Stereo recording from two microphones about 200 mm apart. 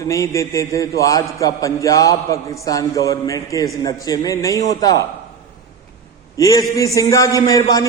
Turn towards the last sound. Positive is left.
turn(degrees=20)  # may be behind; listen again after turning